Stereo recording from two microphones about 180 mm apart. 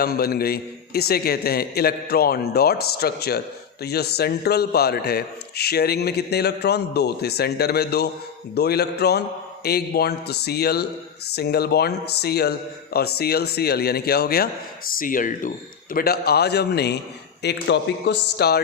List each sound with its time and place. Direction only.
0.0 s a man's voice: 60° left (ahead or behind)